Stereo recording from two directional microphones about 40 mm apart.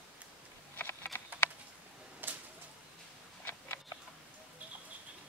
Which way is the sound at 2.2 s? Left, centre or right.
Right.